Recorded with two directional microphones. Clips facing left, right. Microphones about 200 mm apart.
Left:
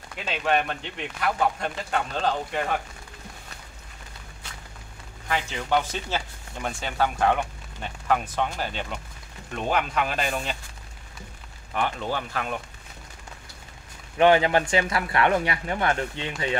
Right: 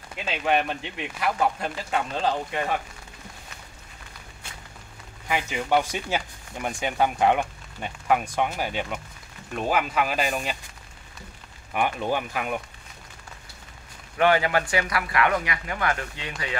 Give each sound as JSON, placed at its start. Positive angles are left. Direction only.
{"t": 0.2, "sound": "speech", "side_deg": -5}
{"t": 5.3, "sound": "speech", "side_deg": -10}
{"t": 11.7, "sound": "speech", "side_deg": -15}
{"t": 14.1, "sound": "speech", "side_deg": 20}